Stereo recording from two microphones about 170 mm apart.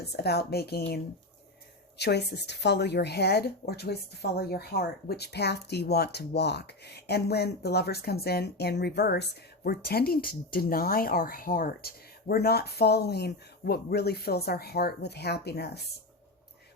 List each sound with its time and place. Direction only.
0.0 s a woman's voice: 70° left (ahead or behind)